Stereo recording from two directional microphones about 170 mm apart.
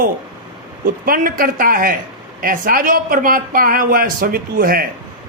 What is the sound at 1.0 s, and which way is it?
Speech, 55° right (ahead or behind).